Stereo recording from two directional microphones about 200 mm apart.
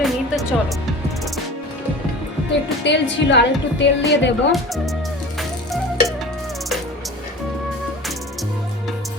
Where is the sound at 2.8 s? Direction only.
60° left (ahead or behind).